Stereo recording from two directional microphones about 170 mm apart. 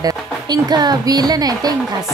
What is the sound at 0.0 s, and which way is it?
A woman's voice, 25° right (ahead or behind).